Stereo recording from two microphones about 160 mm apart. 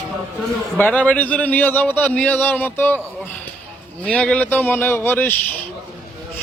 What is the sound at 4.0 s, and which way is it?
A man's voice, 5° left (ahead or behind).